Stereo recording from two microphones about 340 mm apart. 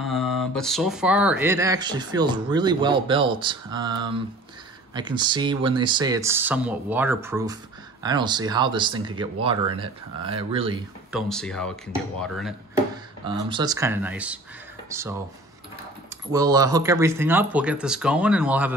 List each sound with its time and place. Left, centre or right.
0.0 s speech: centre
11.1 s speech: centre
13.2 s speech: centre
16.3 s speech: centre